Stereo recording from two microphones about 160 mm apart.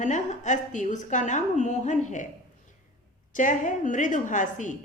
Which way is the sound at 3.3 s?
55° left (ahead or behind).